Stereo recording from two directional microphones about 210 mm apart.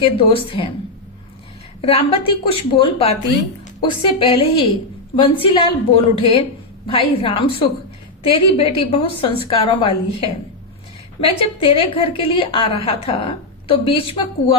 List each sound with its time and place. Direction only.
0.0 s a woman's voice: 25° left (ahead or behind)
1.8 s a woman's voice: 25° left (ahead or behind)